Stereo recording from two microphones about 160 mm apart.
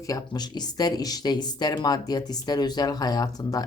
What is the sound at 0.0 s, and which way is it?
Speech, 20° left (ahead or behind).